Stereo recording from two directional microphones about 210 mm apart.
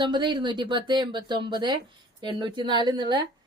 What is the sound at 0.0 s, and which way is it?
Speech, 20° right (ahead or behind).